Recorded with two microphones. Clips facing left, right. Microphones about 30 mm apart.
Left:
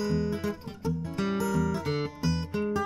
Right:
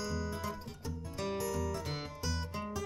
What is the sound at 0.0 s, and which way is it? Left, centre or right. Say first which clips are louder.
Music: left 9 dB; left.